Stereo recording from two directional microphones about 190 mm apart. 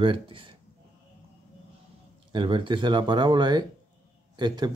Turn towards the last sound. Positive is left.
turn(degrees=-25)  # may be behind; listen again after turning